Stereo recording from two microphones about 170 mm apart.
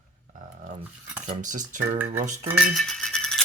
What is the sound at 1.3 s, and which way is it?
Speech, 45° right (ahead or behind).